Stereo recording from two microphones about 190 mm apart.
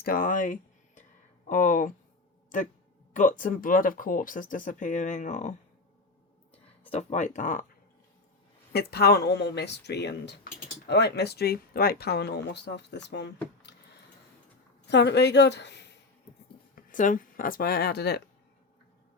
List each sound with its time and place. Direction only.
0.0 s speech: 50° left (ahead or behind)
6.9 s speech: 40° left (ahead or behind)
8.7 s speech: 55° left (ahead or behind)
14.8 s speech: 65° left (ahead or behind)
16.7 s speech: 45° left (ahead or behind)